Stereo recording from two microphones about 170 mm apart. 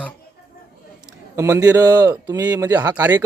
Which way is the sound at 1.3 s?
15° right (ahead or behind).